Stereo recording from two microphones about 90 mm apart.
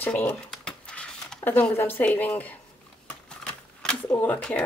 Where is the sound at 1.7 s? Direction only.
25° left (ahead or behind).